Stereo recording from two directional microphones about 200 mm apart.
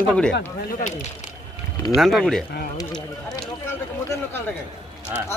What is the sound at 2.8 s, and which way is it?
Speech, 20° left (ahead or behind).